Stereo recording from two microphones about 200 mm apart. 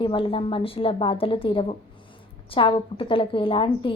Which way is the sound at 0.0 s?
25° left (ahead or behind).